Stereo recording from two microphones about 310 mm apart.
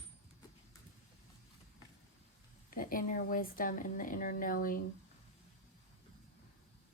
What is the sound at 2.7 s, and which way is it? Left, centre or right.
Speech, left.